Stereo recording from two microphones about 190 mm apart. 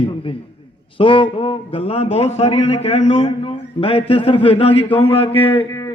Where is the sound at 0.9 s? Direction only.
25° left (ahead or behind).